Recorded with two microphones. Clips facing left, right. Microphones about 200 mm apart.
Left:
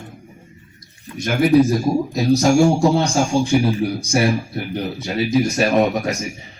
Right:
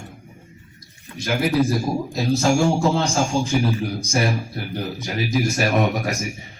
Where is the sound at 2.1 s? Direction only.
15° left (ahead or behind).